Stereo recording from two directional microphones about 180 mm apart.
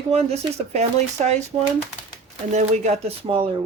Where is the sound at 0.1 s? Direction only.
35° right (ahead or behind).